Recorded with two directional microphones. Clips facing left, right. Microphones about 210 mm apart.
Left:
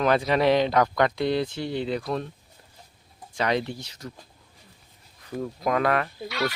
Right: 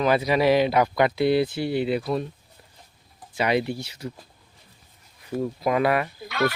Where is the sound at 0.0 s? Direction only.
5° right (ahead or behind).